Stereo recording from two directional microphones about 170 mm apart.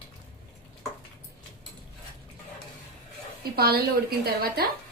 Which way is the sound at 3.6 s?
65° right (ahead or behind).